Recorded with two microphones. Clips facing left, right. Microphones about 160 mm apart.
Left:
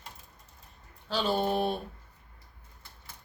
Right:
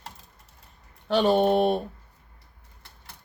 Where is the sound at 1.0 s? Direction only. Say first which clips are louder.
Right 8 dB; 65° right (ahead or behind).